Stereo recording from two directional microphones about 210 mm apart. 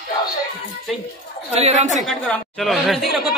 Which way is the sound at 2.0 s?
Centre (ahead or behind).